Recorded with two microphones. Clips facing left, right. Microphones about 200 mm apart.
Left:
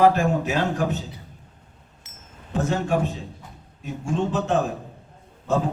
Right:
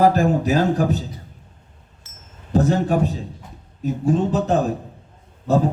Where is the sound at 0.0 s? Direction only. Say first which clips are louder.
Right 2 dB; 35° right (ahead or behind).